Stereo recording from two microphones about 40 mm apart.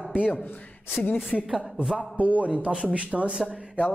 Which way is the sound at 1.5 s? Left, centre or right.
Centre.